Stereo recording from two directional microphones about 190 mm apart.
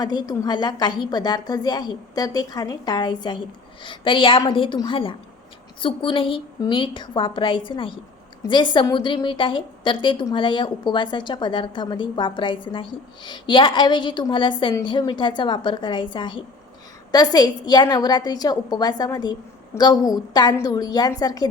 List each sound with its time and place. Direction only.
0.0 s a woman's voice: 20° left (ahead or behind)